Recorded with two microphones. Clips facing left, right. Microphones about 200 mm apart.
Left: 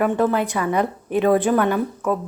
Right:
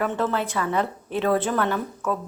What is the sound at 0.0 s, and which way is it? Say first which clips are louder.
Speech: left 6 dB; 15° left (ahead or behind).